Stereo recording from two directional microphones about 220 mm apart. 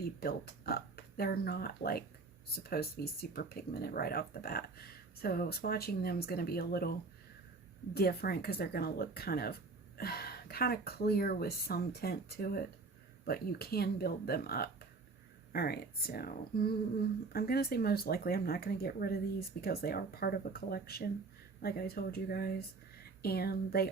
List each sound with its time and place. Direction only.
0.0 s speech: 45° left (ahead or behind)
7.9 s speech: 45° left (ahead or behind)